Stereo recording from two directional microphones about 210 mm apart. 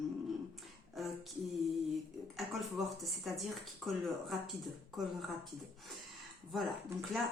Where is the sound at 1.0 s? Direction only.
Centre (ahead or behind).